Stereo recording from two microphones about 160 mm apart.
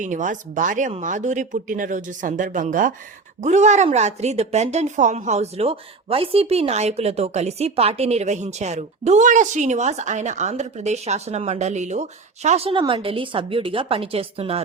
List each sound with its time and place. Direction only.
0.0 s a woman's voice: 50° right (ahead or behind)